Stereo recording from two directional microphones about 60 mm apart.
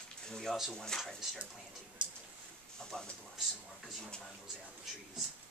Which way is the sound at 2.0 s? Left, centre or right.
Right.